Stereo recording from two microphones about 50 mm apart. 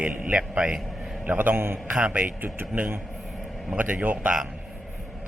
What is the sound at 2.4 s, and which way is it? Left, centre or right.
A man's voice, right.